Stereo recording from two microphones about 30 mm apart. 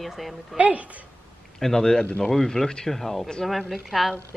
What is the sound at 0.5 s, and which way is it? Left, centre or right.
Speech, right.